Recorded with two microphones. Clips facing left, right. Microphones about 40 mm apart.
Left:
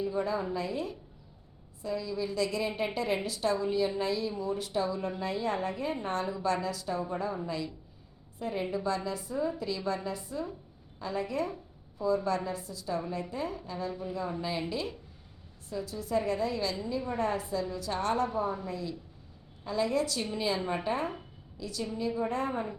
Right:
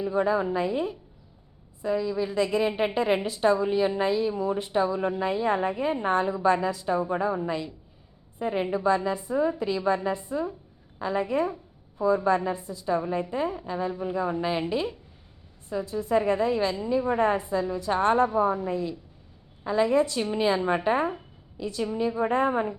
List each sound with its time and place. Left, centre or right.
0.0 s a woman's voice: right